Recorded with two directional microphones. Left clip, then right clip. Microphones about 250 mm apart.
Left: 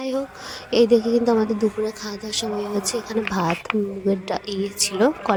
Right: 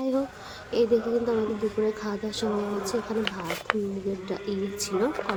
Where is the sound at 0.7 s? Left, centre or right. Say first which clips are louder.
Left 7 dB; left.